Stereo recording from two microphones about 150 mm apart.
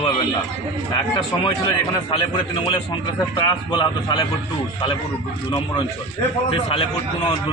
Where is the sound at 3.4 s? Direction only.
25° left (ahead or behind).